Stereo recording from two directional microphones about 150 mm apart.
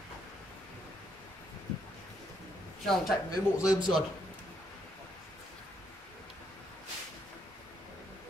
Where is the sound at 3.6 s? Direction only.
25° left (ahead or behind).